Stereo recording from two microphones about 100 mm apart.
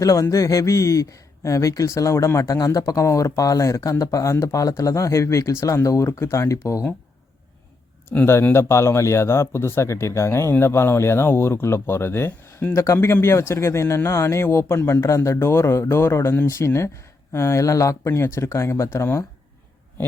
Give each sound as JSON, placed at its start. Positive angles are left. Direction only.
{"t": 0.0, "sound": "speech", "side_deg": 35}
{"t": 8.1, "sound": "speech", "side_deg": 25}